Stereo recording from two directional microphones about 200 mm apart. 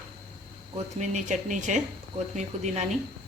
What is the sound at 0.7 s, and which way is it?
Speech, 35° right (ahead or behind).